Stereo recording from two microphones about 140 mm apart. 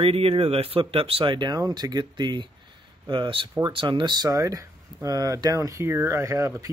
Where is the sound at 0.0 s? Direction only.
45° right (ahead or behind).